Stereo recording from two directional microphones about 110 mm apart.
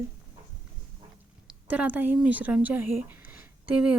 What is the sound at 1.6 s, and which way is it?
A woman's voice, 15° right (ahead or behind).